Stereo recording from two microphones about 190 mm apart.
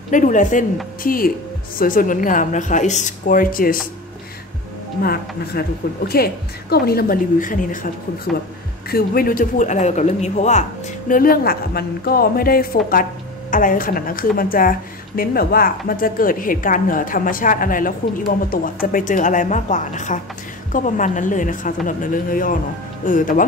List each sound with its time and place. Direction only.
0.1 s a man's voice: 40° left (ahead or behind)
5.0 s a woman's voice: 55° left (ahead or behind); by 10.6 s 40° left (ahead or behind)
11.1 s a woman's voice: 50° left (ahead or behind)